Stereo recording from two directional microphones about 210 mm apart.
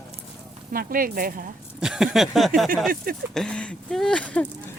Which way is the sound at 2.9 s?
45° right (ahead or behind).